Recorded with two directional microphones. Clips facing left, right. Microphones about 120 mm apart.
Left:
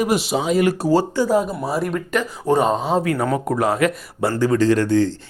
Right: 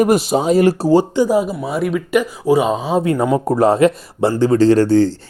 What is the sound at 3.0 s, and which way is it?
A woman's voice, 25° right (ahead or behind).